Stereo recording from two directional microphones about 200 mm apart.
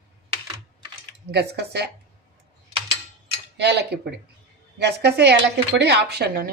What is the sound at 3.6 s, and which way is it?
Speech, 55° right (ahead or behind).